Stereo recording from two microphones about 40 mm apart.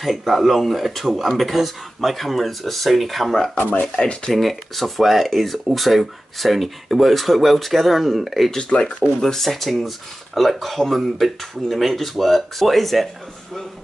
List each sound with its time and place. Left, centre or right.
0.0 s speech: centre
8.5 s speech: centre